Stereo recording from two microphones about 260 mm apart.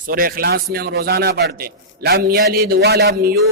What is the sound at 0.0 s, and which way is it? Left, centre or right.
A man's voice, right.